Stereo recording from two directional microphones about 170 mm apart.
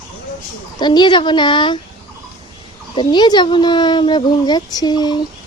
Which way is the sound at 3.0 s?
25° left (ahead or behind).